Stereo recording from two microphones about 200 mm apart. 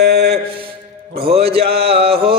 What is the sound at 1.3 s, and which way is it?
Music, 30° right (ahead or behind).